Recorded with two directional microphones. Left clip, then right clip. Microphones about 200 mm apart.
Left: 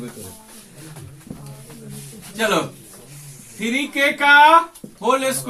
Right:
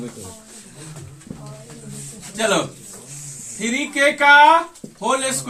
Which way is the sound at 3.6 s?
15° right (ahead or behind).